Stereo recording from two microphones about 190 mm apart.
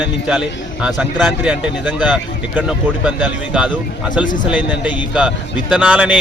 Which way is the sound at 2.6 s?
5° right (ahead or behind).